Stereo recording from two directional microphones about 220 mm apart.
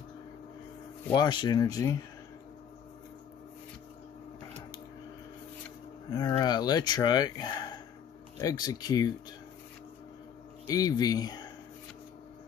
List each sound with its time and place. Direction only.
1.1 s speech: 20° left (ahead or behind)
6.0 s speech: 20° left (ahead or behind)
10.7 s speech: 15° left (ahead or behind)